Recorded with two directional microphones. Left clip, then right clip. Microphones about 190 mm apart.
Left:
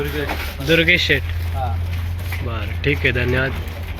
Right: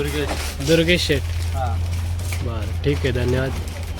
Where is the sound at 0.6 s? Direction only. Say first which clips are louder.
Left 3 dB; 25° right (ahead or behind).